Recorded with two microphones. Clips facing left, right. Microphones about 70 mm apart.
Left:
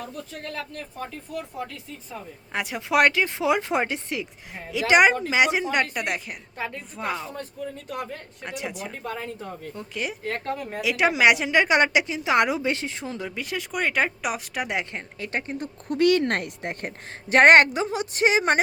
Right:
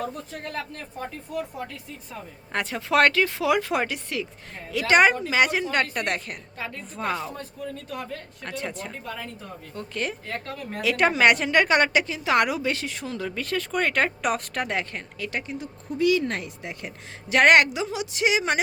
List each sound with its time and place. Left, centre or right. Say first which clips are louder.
1.3 s speech: right 4 dB; centre
2.5 s a woman's voice: right 1 dB; centre
8.4 s speech: even; centre
10.2 s a woman's voice: left 5 dB; left
10.7 s speech: right 1 dB; centre
13.2 s speech: right 3 dB; centre
14.9 s a woman's voice: left 1 dB; left
15.9 s a woman's voice: left 2 dB; left